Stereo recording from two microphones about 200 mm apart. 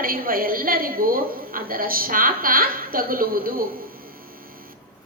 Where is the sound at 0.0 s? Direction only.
45° right (ahead or behind).